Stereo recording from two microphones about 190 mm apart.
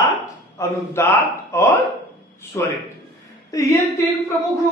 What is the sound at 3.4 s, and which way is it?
Speech, 15° left (ahead or behind).